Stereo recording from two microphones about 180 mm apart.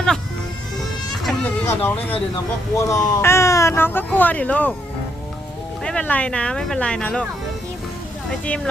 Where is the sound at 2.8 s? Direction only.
20° left (ahead or behind).